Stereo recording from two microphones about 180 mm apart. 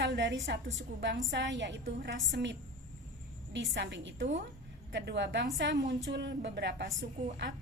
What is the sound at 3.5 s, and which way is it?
Speech, 85° right.